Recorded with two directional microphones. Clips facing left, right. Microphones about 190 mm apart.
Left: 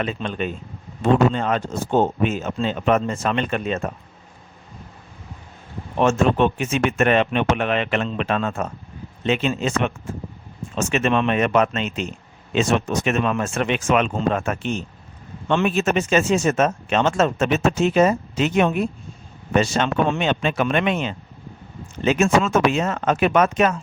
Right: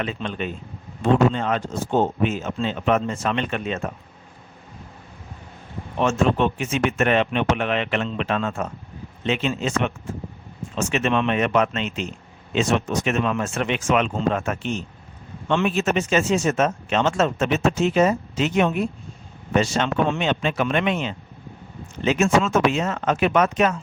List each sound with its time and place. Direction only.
0.0 s speech: 40° left (ahead or behind)
6.0 s speech: 55° left (ahead or behind)